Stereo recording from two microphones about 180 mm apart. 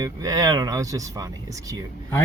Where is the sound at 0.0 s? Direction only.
20° right (ahead or behind).